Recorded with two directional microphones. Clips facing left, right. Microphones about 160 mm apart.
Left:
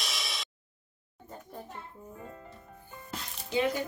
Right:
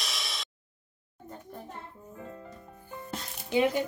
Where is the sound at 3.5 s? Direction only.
20° right (ahead or behind).